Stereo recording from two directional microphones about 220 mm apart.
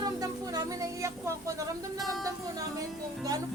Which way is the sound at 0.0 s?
15° right (ahead or behind).